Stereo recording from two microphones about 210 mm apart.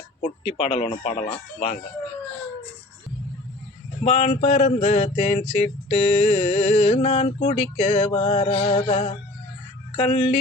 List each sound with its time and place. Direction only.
0.4 s mantra: 25° left (ahead or behind)
4.0 s a sound: 30° left (ahead or behind)
5.5 s mantra: 30° left (ahead or behind)